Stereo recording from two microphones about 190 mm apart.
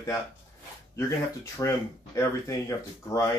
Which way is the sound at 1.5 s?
15° left (ahead or behind).